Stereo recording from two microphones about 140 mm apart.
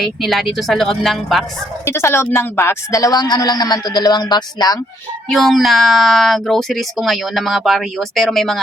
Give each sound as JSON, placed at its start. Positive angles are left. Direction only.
{"t": 0.0, "sound": "speech", "side_deg": 0}
{"t": 1.8, "sound": "a man's voice", "side_deg": 20}
{"t": 5.3, "sound": "speech", "side_deg": 0}